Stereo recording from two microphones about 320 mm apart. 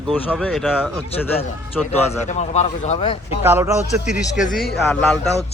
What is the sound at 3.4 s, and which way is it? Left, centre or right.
Speech, centre.